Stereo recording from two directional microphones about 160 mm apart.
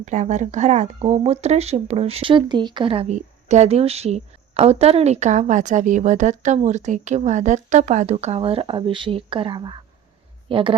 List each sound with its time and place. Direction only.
0.0 s a woman's voice: 50° right (ahead or behind); by 10.8 s 35° right (ahead or behind)